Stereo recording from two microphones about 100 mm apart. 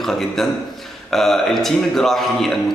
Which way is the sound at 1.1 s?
5° left (ahead or behind).